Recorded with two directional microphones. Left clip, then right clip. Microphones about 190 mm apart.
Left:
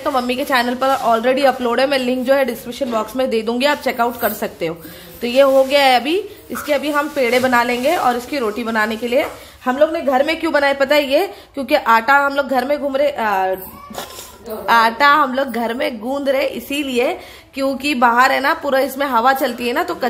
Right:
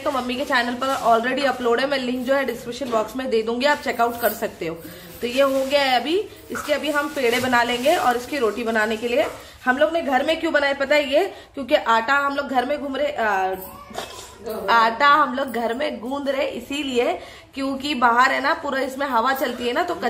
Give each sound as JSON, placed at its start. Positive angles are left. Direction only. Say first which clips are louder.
{"t": 0.0, "sound": "speech", "louder": "left 5 dB", "side_deg": 30}
{"t": 14.7, "sound": "speech", "louder": "left 4 dB", "side_deg": 35}